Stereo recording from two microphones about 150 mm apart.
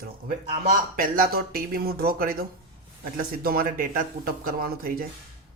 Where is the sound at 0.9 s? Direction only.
70° right (ahead or behind).